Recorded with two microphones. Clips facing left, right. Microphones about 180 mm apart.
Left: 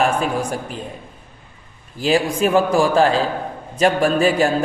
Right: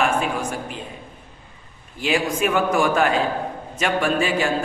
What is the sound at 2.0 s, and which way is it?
A woman's voice, 35° left (ahead or behind).